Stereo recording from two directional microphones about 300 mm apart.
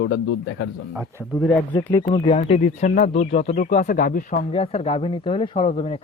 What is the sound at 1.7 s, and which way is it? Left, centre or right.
Speech, centre.